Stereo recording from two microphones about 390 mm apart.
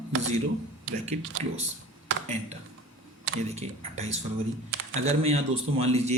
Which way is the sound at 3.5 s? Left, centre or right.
Centre.